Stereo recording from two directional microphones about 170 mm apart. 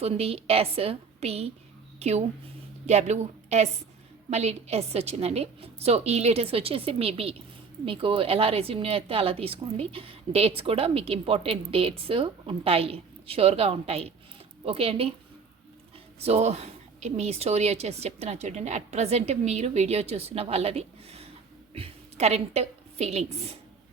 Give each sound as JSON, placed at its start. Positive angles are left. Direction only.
{"t": 0.0, "sound": "a woman's voice", "side_deg": -35}
{"t": 16.2, "sound": "a woman's voice", "side_deg": -40}